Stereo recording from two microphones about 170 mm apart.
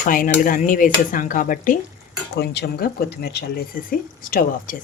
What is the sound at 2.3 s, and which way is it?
Speech, 75° left (ahead or behind).